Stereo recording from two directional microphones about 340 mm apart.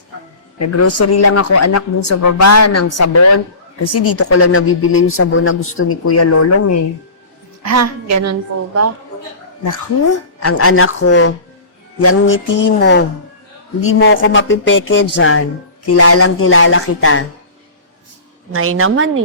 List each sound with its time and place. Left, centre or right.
0.8 s a woman's voice: left
7.6 s a woman's voice: right
10.4 s a woman's voice: left
18.5 s a woman's voice: right